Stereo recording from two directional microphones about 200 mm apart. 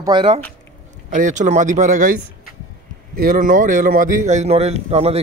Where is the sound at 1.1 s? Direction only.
40° right (ahead or behind).